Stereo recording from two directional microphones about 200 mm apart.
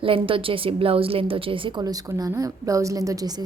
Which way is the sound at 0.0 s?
25° right (ahead or behind).